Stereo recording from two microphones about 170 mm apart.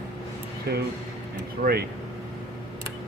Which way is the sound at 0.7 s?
70° right (ahead or behind).